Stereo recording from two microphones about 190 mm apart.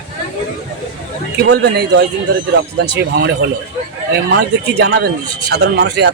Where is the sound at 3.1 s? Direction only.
60° right (ahead or behind).